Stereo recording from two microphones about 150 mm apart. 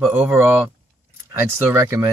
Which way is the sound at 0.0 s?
15° right (ahead or behind).